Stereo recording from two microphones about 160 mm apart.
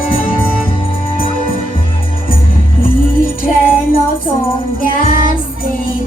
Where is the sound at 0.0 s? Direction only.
60° left (ahead or behind).